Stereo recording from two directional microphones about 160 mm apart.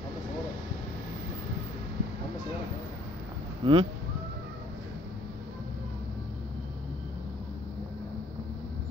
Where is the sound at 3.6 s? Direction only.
35° right (ahead or behind).